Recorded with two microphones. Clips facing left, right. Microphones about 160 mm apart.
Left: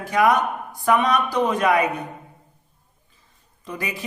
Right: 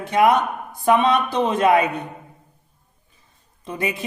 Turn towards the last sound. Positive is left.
turn(degrees=-25)  # may be behind; listen again after turning